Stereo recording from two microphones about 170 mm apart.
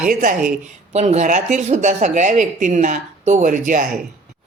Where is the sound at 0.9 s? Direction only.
40° right (ahead or behind).